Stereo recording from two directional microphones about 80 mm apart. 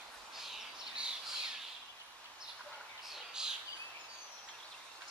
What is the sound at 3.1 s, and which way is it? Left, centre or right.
Bird, centre.